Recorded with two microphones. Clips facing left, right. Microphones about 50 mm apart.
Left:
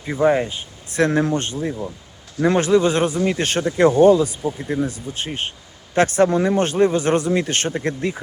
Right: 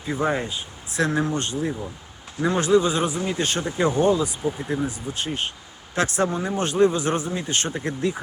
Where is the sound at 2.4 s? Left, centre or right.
Left.